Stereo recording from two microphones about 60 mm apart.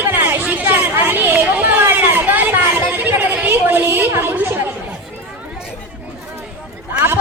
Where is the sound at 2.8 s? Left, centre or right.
Right.